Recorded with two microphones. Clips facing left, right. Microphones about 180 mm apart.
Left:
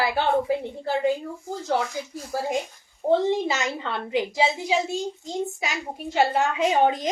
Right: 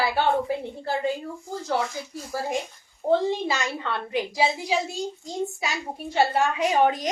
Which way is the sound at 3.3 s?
20° left (ahead or behind).